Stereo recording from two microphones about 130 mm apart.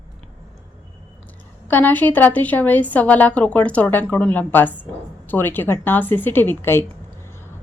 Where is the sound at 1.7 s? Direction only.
15° left (ahead or behind).